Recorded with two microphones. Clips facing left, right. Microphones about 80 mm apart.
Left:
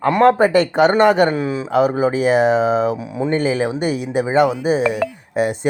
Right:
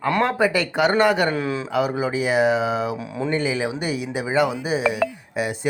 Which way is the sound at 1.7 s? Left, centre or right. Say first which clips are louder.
Left 7 dB; left.